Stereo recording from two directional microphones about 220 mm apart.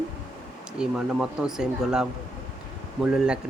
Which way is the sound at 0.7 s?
5° right (ahead or behind).